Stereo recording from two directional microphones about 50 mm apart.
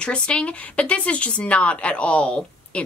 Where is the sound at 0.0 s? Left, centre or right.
Left.